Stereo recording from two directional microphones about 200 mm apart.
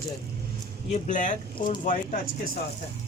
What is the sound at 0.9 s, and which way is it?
A man's voice, 40° left (ahead or behind).